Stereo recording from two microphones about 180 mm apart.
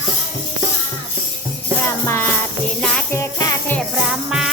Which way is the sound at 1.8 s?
10° left (ahead or behind).